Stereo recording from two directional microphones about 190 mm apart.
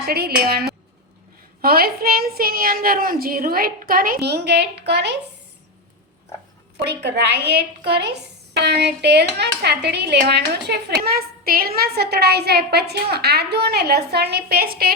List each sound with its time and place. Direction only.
0.1 s a woman's voice: 55° right (ahead or behind)
6.8 s a woman's voice: 60° right (ahead or behind)